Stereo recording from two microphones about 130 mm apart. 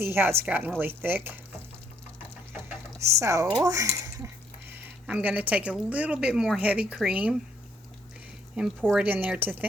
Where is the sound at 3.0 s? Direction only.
25° right (ahead or behind).